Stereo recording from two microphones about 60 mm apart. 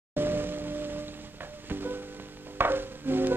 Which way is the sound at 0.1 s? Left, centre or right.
Right.